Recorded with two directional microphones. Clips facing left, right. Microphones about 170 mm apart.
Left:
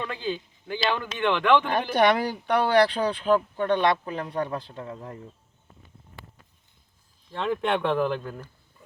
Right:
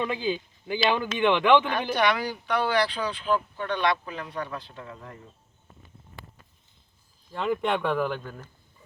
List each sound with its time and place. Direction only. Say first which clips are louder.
0.0 s speech: right 3 dB; 10° right (ahead or behind)
1.7 s speech: left 3 dB; 50° left (ahead or behind)
7.3 s speech: left 1 dB; 5° right (ahead or behind)